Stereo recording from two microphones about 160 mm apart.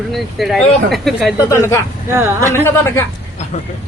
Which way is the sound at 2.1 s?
15° right (ahead or behind).